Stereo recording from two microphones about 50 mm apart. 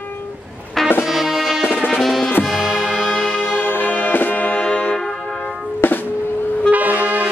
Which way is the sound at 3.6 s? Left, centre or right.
Left.